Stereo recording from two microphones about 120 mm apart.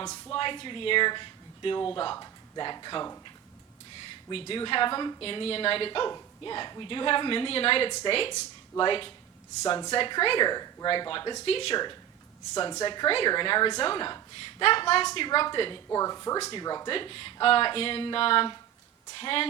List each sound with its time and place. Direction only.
0.0 s speech: 35° left (ahead or behind)
4.3 s a woman's voice: 50° left (ahead or behind)
11.4 s a woman's voice: 50° left (ahead or behind)
12.5 s speech: 40° left (ahead or behind)
14.6 s a woman's voice: 50° left (ahead or behind)
15.9 s speech: 30° left (ahead or behind)
16.9 s a woman's voice: 50° left (ahead or behind)